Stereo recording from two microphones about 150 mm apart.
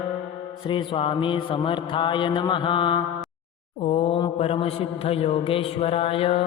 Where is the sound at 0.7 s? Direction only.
35° left (ahead or behind).